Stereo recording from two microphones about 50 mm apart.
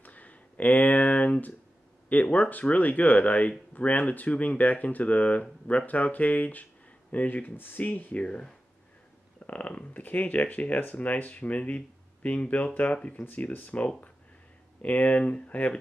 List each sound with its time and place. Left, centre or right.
0.0 s a sound: left
2.1 s speech: left
9.5 s speech: left